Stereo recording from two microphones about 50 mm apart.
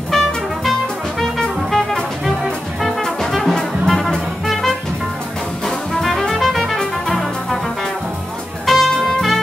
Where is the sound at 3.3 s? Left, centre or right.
Centre.